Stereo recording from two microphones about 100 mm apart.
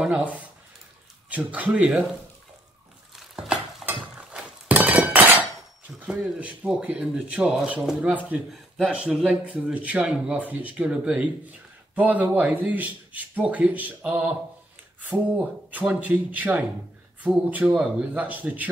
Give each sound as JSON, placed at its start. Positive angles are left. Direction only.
{"t": 0.0, "sound": "speech", "side_deg": -15}
{"t": 3.2, "sound": "stir", "side_deg": -5}
{"t": 3.8, "sound": "hammer", "side_deg": -10}
{"t": 5.9, "sound": "speech", "side_deg": -10}
{"t": 8.5, "sound": "speech", "side_deg": 0}
{"t": 8.9, "sound": "speech", "side_deg": -10}